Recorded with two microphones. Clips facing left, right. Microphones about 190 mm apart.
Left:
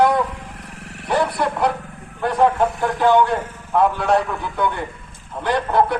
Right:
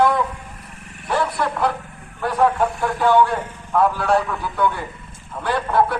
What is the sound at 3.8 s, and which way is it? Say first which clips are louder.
Speech: left 1 dB; centre (ahead or behind).